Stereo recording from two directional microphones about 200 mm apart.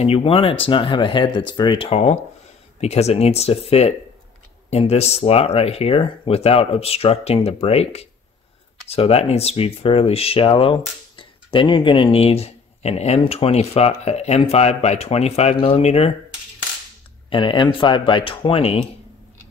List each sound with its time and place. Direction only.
0.0 s speech: 30° left (ahead or behind)
17.3 s speech: 25° left (ahead or behind)